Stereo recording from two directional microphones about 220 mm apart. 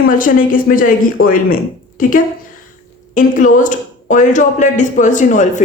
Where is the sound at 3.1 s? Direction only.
35° left (ahead or behind).